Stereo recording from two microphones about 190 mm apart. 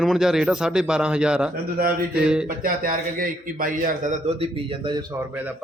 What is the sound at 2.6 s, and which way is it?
Speech, 45° right (ahead or behind).